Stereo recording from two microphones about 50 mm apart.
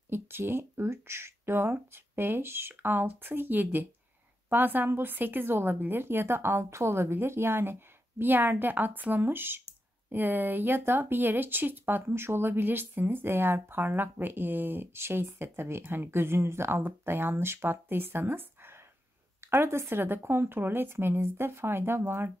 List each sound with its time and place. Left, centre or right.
0.1 s speech: right
8.2 s a woman's voice: right
16.8 s speech: right
19.5 s speech: right
20.0 s speech: right